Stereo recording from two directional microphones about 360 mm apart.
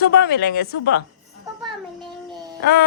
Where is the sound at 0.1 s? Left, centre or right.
Left.